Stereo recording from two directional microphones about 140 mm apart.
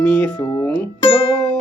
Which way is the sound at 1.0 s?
40° left (ahead or behind).